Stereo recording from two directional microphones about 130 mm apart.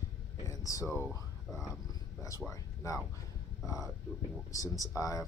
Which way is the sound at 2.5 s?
25° left (ahead or behind).